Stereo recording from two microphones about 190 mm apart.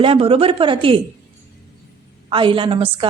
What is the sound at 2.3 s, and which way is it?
Speech, 25° right (ahead or behind).